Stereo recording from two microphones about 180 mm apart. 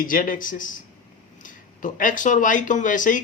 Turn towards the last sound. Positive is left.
turn(degrees=45)  # may be behind; listen again after turning